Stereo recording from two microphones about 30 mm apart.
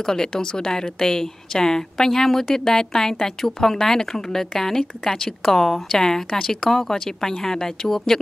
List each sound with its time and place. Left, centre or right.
0.0 s a woman's voice: centre